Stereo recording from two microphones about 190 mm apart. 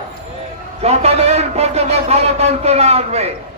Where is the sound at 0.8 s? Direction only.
35° right (ahead or behind).